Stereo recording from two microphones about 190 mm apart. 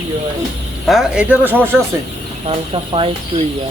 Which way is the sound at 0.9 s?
5° right (ahead or behind).